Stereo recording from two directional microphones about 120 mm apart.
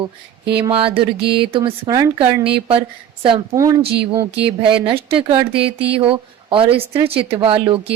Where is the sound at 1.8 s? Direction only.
30° right (ahead or behind).